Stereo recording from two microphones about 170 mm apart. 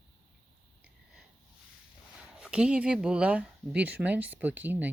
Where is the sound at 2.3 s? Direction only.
5° right (ahead or behind).